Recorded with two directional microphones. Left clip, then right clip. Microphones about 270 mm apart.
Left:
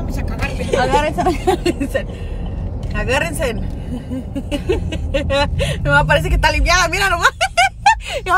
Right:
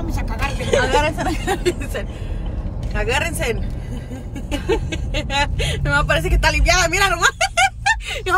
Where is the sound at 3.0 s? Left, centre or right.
Centre.